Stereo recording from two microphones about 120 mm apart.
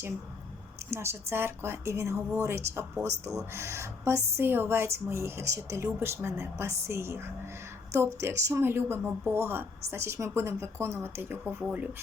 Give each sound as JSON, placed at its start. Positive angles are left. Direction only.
{"t": 0.9, "sound": "a woman's voice", "side_deg": -20}